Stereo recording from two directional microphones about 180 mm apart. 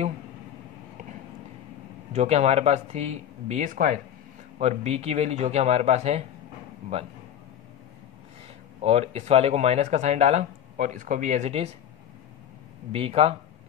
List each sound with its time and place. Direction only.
2.1 s speech: 35° right (ahead or behind)
8.8 s speech: 35° right (ahead or behind)
12.9 s speech: 35° right (ahead or behind)